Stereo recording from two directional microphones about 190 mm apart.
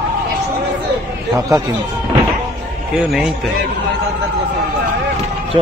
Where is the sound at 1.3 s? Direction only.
20° right (ahead or behind).